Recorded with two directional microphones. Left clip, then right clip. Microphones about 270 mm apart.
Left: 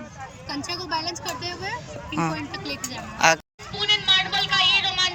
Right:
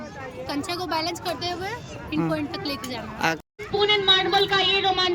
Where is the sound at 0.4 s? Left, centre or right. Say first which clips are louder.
Right 2 dB; centre.